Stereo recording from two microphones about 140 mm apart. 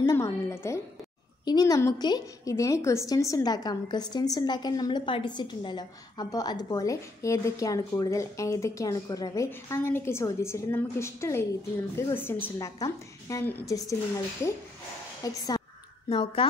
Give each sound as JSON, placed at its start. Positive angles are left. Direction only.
{"t": 0.0, "sound": "music", "side_deg": 20}
{"t": 1.4, "sound": "a woman's voice", "side_deg": 30}
{"t": 15.2, "sound": "a woman's voice", "side_deg": 25}
{"t": 16.1, "sound": "speech", "side_deg": 35}